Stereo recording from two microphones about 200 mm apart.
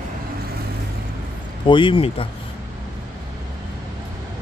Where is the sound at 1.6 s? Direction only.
25° left (ahead or behind).